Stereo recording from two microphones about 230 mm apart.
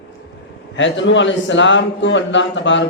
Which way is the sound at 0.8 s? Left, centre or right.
Left.